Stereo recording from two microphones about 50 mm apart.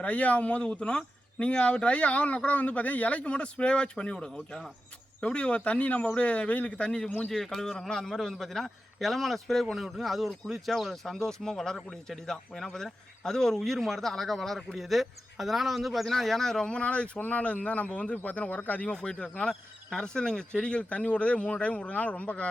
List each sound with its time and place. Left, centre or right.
0.0 s speech: left
7.3 s a man's voice: centre; by 18.9 s left
18.9 s a man's voice: centre